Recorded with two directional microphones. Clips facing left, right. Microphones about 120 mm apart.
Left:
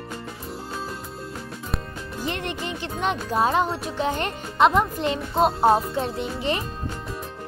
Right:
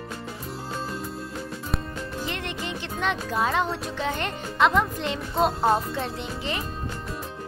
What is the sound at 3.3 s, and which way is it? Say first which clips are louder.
Speech: left 5 dB; 25° left (ahead or behind).